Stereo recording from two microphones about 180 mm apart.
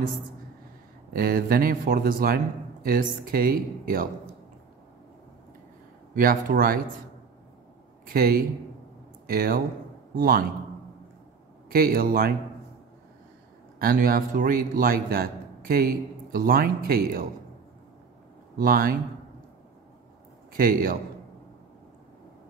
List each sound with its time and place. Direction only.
1.1 s a man's voice: 55° right (ahead or behind)
6.1 s a man's voice: 50° right (ahead or behind)
8.1 s a man's voice: 55° right (ahead or behind)
11.7 s speech: 55° right (ahead or behind)
13.7 s a man's voice: 55° right (ahead or behind)
18.6 s a man's voice: 55° right (ahead or behind)
20.5 s a man's voice: 55° right (ahead or behind)